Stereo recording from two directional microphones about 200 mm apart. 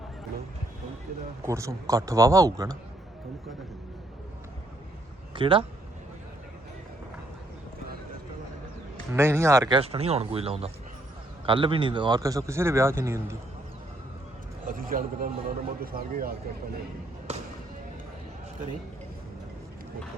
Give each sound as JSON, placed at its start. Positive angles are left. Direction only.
{"t": 1.5, "sound": "speech", "side_deg": -15}
{"t": 5.3, "sound": "speech", "side_deg": -25}
{"t": 9.1, "sound": "speech", "side_deg": -15}
{"t": 14.7, "sound": "a man's voice", "side_deg": -45}
{"t": 17.3, "sound": "speech", "side_deg": -30}